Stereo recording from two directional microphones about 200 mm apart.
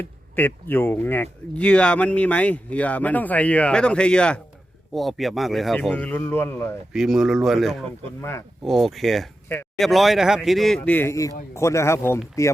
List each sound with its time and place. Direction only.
0.0 s speech: 10° left (ahead or behind)
6.9 s speech: centre (ahead or behind)
8.2 s speech: 15° left (ahead or behind)
8.6 s speech: centre (ahead or behind)